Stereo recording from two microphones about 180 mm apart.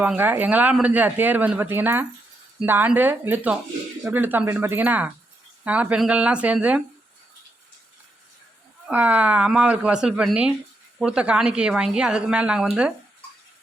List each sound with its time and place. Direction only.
0.0 s speech: 10° right (ahead or behind)
8.9 s a woman's voice: 10° right (ahead or behind)